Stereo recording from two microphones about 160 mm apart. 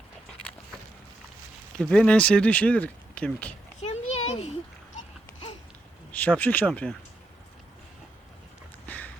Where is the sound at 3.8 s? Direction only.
45° left (ahead or behind).